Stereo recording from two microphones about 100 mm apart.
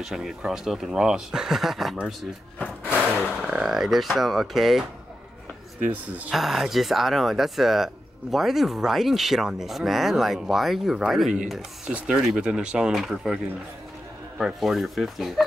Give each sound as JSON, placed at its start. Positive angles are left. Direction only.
{"t": 0.0, "sound": "speech", "side_deg": -5}
{"t": 3.4, "sound": "speech", "side_deg": -5}
{"t": 5.9, "sound": "speech", "side_deg": -15}
{"t": 6.3, "sound": "speech", "side_deg": 0}
{"t": 14.4, "sound": "speech", "side_deg": 0}